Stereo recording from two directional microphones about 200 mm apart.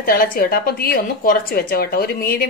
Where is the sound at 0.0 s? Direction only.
50° left (ahead or behind).